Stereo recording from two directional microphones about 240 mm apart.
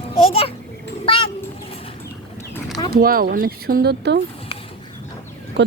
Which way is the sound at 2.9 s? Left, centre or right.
Right.